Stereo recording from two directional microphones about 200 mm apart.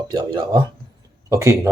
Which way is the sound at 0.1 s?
20° right (ahead or behind).